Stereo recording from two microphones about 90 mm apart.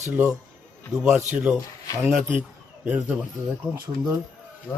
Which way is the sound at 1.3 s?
10° right (ahead or behind).